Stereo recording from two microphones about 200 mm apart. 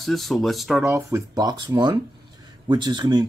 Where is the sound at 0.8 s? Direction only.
15° right (ahead or behind).